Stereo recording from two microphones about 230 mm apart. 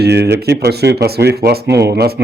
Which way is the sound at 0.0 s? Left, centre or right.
Right.